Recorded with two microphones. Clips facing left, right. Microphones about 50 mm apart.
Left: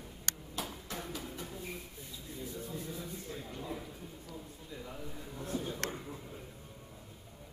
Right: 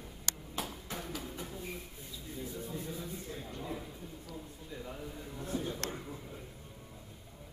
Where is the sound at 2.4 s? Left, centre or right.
Centre.